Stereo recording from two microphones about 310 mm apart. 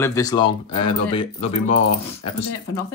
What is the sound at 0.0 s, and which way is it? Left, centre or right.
Speech, centre.